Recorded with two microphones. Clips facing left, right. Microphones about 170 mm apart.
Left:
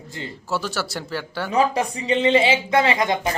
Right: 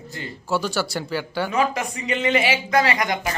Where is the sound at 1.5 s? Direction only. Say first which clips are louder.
Left 5 dB; 35° left (ahead or behind).